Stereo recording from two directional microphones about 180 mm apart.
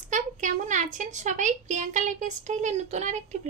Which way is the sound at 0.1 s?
45° right (ahead or behind).